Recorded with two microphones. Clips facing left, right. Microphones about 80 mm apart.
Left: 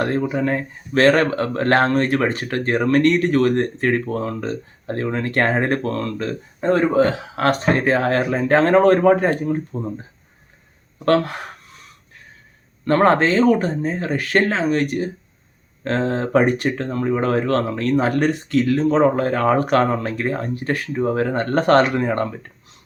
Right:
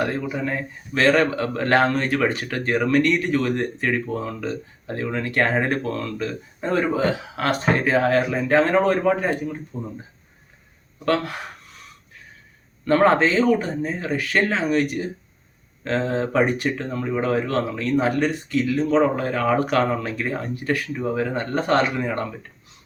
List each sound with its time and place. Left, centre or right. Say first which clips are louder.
0.0 s speech: left 4 dB; left
12.8 s speech: left 1 dB; left
21.9 s speech: left 5 dB; left